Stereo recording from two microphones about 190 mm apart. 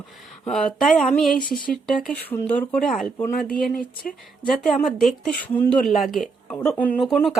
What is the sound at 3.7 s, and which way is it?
Speech, 45° left (ahead or behind).